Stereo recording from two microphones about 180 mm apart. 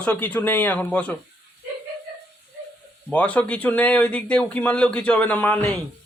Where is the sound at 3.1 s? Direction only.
10° left (ahead or behind).